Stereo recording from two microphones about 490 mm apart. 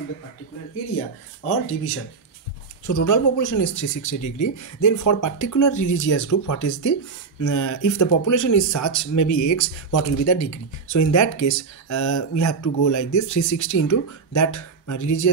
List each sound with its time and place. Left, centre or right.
1.4 s speech: left